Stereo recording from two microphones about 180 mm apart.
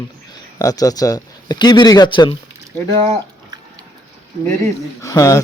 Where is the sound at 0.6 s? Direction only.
20° left (ahead or behind).